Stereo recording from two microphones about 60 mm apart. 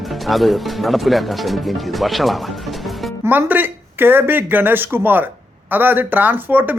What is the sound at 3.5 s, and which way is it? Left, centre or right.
Speech, right.